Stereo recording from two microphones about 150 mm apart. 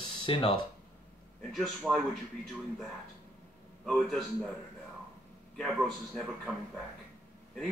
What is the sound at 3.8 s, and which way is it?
Speech, centre (ahead or behind).